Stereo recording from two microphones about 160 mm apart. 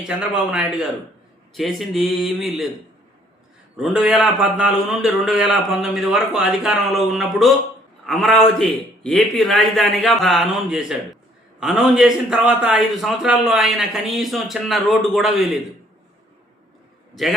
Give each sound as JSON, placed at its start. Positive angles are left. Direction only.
{"t": 0.5, "sound": "a man's voice", "side_deg": -5}
{"t": 3.8, "sound": "a man's voice", "side_deg": -5}